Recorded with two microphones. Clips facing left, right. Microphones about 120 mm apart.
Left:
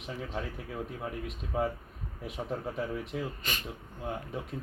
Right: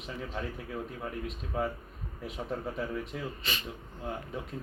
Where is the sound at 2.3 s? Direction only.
5° left (ahead or behind).